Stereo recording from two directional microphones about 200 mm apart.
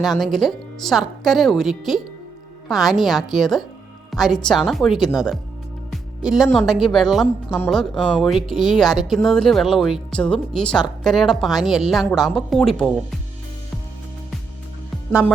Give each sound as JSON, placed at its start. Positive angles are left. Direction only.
{"t": 0.0, "sound": "speech", "side_deg": 0}